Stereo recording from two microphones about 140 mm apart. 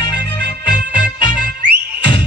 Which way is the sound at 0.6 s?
35° left (ahead or behind).